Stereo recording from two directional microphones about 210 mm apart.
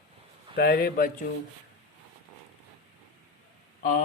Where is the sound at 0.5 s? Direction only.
45° left (ahead or behind).